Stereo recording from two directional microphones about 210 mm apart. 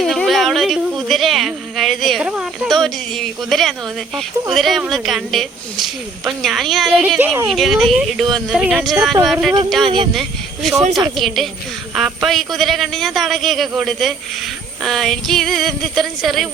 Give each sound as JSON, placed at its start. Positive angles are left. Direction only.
{"t": 0.0, "sound": "speech", "side_deg": 0}
{"t": 9.8, "sound": "speech", "side_deg": -25}
{"t": 10.2, "sound": "speech", "side_deg": 0}